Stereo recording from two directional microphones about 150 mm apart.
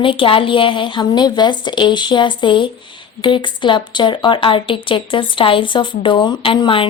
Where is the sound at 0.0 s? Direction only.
35° left (ahead or behind).